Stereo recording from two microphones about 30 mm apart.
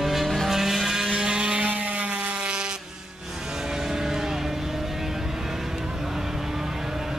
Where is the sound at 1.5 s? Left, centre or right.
Right.